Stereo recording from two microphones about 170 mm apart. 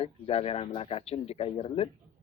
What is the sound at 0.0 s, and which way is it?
Speech, 35° left (ahead or behind).